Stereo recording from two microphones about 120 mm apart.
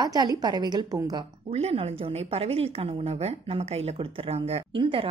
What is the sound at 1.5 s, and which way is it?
A woman's voice, 55° right (ahead or behind).